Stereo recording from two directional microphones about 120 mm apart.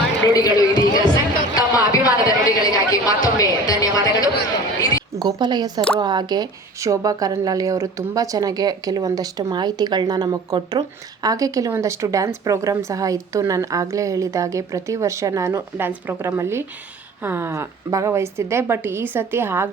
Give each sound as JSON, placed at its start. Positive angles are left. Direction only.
{"t": 0.3, "sound": "a sound", "side_deg": 35}
{"t": 3.3, "sound": "music", "side_deg": 30}
{"t": 5.3, "sound": "a woman's voice", "side_deg": -35}